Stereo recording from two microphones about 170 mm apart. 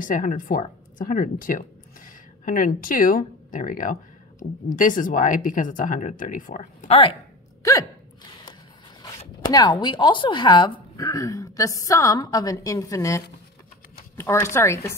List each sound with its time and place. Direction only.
0.0 s speech: 50° left (ahead or behind)
7.6 s gasp: 20° left (ahead or behind)
9.0 s a woman's voice: 25° left (ahead or behind)